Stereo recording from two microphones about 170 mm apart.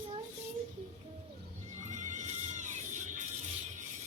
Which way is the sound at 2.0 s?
45° right (ahead or behind).